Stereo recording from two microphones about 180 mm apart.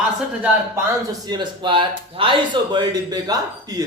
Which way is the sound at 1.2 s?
25° right (ahead or behind).